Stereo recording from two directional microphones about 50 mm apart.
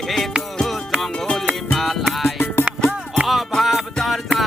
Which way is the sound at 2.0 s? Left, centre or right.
Centre.